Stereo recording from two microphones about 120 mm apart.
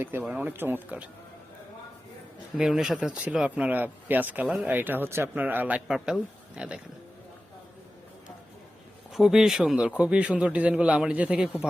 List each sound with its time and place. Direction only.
0.0 s speech: 20° right (ahead or behind)
2.6 s speech: 5° right (ahead or behind)
9.1 s speech: 5° right (ahead or behind)